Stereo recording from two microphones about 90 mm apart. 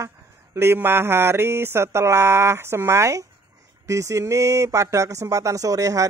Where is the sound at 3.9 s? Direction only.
35° right (ahead or behind).